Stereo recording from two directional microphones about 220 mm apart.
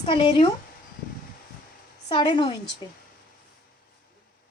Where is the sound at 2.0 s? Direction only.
20° left (ahead or behind).